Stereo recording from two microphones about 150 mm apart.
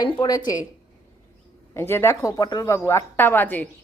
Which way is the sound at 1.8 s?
15° left (ahead or behind).